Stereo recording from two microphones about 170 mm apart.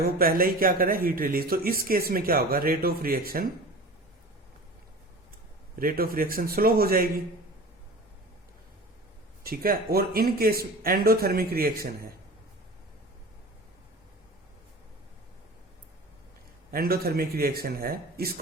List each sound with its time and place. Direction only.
0.0 s speech: 60° right (ahead or behind)
5.8 s speech: 60° right (ahead or behind)
9.4 s speech: 60° right (ahead or behind)
16.7 s speech: 65° right (ahead or behind)